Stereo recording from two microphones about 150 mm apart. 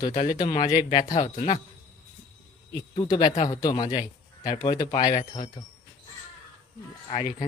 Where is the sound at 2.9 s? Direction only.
30° left (ahead or behind).